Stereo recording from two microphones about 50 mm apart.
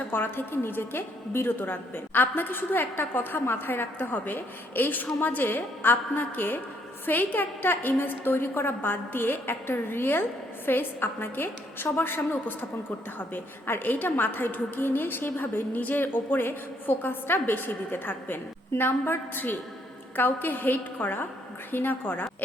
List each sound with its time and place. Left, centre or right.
0.1 s a woman's voice: left
13.7 s a woman's voice: left